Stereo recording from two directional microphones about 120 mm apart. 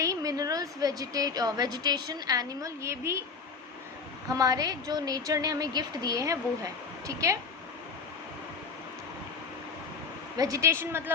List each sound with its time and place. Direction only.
0.0 s a woman's voice: 30° right (ahead or behind)
4.3 s a woman's voice: 30° right (ahead or behind)
10.3 s a woman's voice: 30° right (ahead or behind)